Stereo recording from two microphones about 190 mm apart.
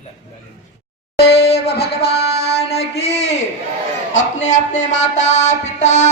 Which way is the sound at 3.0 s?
35° left (ahead or behind).